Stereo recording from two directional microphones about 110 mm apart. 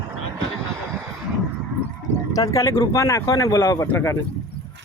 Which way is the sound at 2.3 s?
30° left (ahead or behind).